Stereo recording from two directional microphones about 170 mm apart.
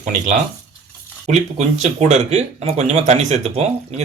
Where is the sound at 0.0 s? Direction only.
45° right (ahead or behind).